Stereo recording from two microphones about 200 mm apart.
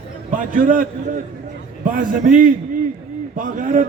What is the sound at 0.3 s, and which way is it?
A man's voice, 40° right (ahead or behind).